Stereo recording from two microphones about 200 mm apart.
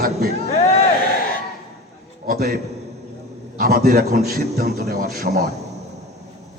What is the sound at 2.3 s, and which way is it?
Speech, 50° right (ahead or behind).